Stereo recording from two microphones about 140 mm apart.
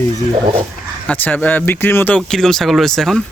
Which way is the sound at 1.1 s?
10° left (ahead or behind).